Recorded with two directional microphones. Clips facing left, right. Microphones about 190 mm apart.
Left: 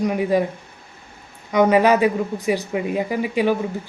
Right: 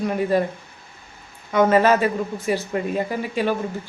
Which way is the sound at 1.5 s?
15° left (ahead or behind).